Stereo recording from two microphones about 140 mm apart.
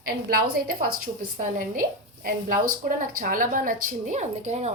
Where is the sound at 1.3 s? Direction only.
75° right (ahead or behind).